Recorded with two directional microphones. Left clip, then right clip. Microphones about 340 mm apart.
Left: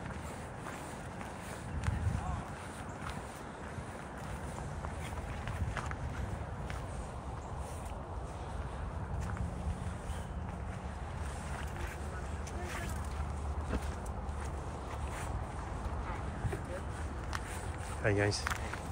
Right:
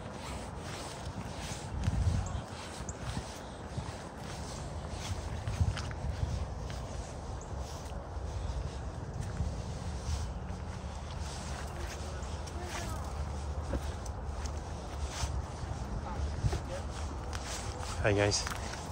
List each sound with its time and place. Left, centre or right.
18.0 s speech: centre